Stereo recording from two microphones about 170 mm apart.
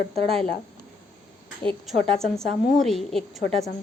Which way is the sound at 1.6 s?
5° left (ahead or behind).